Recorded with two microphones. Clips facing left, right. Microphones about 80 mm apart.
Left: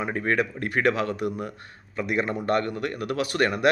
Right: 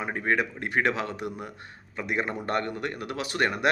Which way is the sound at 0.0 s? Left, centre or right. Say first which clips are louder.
Left 2 dB; centre.